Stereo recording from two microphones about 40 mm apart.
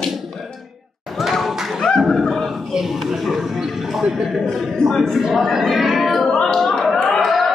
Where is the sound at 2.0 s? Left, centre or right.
Centre.